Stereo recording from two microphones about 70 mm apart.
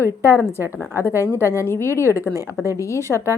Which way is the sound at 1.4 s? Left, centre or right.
Left.